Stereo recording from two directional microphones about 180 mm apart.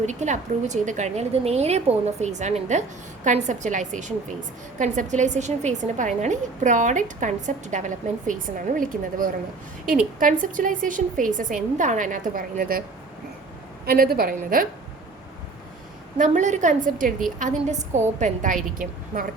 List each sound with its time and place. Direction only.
0.0 s a woman's voice: 40° right (ahead or behind)
13.8 s a woman's voice: 55° right (ahead or behind)
16.1 s a woman's voice: 45° right (ahead or behind)